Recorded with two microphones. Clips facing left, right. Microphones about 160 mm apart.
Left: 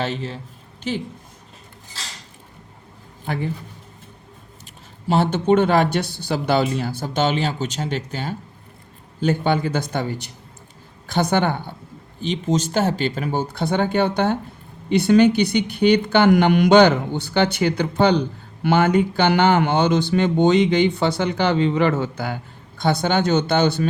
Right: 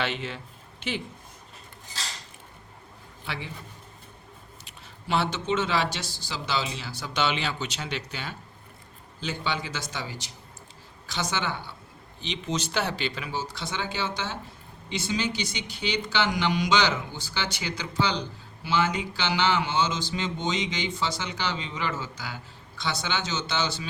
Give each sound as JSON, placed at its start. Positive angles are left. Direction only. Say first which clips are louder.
{"t": 0.0, "sound": "a man's voice", "louder": "left 5 dB", "side_deg": 40}
{"t": 3.2, "sound": "speech", "louder": "left 11 dB", "side_deg": 45}
{"t": 4.6, "sound": "a woman's voice", "louder": "left 13 dB", "side_deg": 45}